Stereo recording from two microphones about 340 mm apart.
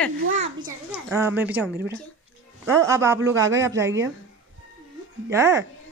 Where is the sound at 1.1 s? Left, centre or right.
Centre.